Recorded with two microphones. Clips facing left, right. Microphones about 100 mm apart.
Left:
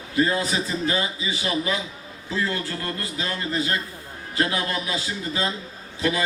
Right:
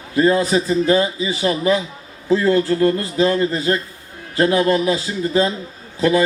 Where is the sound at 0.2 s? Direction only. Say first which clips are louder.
Right 7 dB; 40° right (ahead or behind).